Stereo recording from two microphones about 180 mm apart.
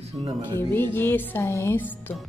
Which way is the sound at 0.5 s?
10° left (ahead or behind).